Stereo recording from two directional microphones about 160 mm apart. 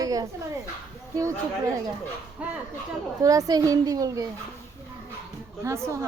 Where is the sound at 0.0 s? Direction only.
20° right (ahead or behind).